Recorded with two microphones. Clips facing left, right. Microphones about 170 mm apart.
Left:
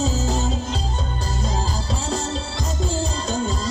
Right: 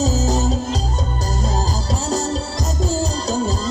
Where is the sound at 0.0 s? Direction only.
40° right (ahead or behind).